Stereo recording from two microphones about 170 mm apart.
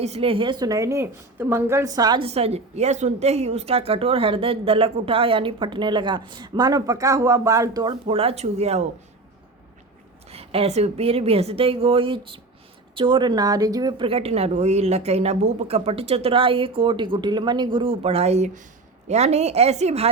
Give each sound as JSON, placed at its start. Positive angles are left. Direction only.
{"t": 0.0, "sound": "a woman's voice", "side_deg": -35}
{"t": 0.6, "sound": "a woman's voice", "side_deg": -20}
{"t": 2.2, "sound": "a woman's voice", "side_deg": -35}
{"t": 8.0, "sound": "a woman's voice", "side_deg": -35}
{"t": 10.2, "sound": "a woman's voice", "side_deg": -35}